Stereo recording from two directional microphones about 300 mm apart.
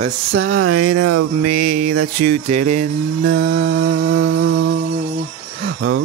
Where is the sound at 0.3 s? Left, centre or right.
Right.